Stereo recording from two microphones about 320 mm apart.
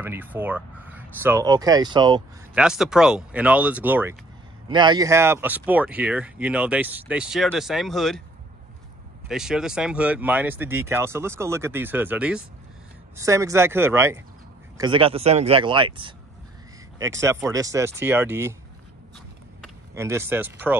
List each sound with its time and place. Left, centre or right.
0.0 s speech: centre
2.5 s speech: centre
9.3 s speech: centre
19.9 s speech: centre